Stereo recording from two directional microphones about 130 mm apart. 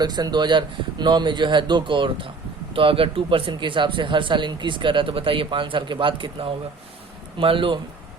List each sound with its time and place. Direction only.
0.0 s speech: 30° right (ahead or behind)